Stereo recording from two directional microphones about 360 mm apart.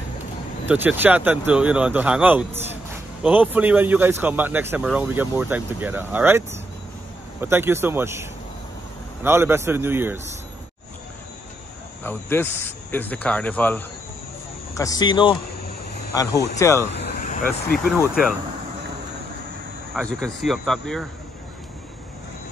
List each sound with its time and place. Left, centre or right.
0.7 s a man's voice: centre
12.0 s speech: centre
16.9 s vehicle: left
17.7 s speech: centre
19.9 s speech: centre